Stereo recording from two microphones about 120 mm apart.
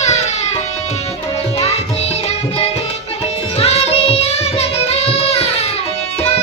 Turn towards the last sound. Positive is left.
turn(degrees=60)  # may be behind; listen again after turning